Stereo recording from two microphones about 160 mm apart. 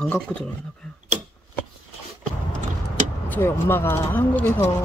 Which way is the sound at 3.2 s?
15° left (ahead or behind).